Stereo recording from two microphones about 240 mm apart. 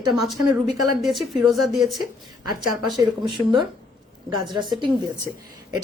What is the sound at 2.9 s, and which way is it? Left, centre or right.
Speech, centre.